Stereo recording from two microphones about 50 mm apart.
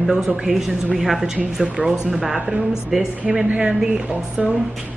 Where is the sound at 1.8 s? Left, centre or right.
Centre.